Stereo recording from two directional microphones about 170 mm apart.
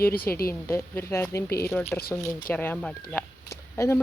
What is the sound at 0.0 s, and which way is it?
Speech, 60° left (ahead or behind).